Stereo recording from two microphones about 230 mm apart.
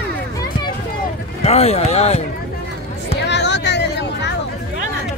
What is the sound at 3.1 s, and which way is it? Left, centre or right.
Music, left.